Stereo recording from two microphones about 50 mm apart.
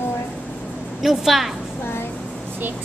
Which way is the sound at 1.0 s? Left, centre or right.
Centre.